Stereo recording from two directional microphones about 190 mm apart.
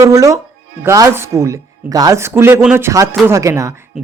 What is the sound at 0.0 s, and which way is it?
Speech, 15° right (ahead or behind).